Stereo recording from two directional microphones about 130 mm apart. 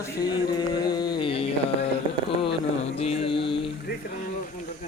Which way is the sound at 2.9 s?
50° left (ahead or behind).